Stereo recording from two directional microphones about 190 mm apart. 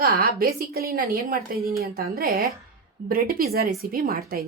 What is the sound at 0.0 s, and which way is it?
A woman's voice, 50° right (ahead or behind).